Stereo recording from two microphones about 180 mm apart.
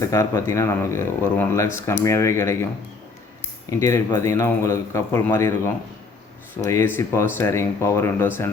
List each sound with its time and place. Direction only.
0.0 s speech: 15° left (ahead or behind)
3.7 s speech: 15° left (ahead or behind)